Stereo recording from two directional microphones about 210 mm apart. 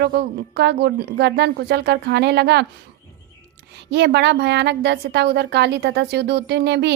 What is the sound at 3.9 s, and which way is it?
A woman's voice, 55° right (ahead or behind).